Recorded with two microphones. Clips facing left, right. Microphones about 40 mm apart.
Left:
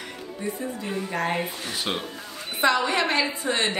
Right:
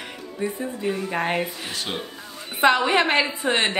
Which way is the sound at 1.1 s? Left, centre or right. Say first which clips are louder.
Even; right.